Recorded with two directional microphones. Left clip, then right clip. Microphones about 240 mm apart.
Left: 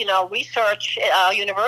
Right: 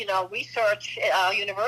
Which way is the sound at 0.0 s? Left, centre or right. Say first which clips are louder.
Left 7 dB; left.